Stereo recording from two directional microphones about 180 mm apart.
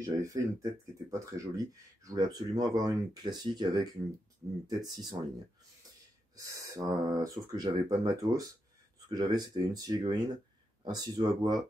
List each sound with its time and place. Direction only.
0.0 s speech: 20° right (ahead or behind)
6.3 s speech: 20° right (ahead or behind)